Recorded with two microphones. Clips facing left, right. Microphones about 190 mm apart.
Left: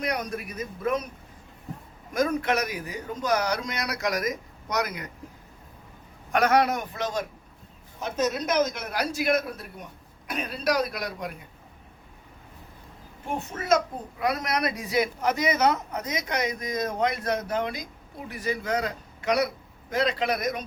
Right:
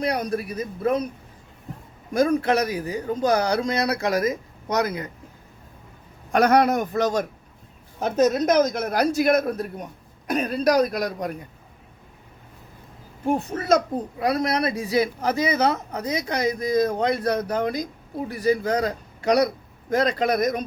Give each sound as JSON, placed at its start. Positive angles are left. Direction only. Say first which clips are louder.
{"t": 0.0, "sound": "a child's voice", "louder": "right 5 dB", "side_deg": -30}
{"t": 2.1, "sound": "a child's voice", "louder": "right 5 dB", "side_deg": -35}
{"t": 6.3, "sound": "a child's voice", "louder": "right 4 dB", "side_deg": -40}
{"t": 13.5, "sound": "a child's voice", "louder": "even", "side_deg": -35}